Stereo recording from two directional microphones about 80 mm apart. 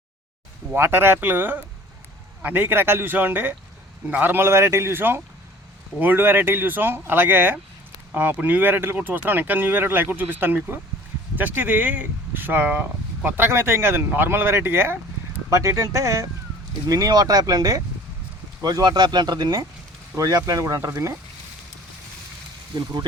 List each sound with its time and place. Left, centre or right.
0.7 s speech: right
16.9 s speech: right
22.7 s speech: right